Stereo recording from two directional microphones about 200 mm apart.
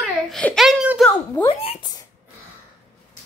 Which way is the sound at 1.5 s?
30° left (ahead or behind).